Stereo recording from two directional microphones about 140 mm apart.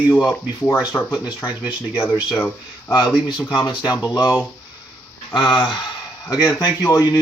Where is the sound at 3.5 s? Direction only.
35° left (ahead or behind).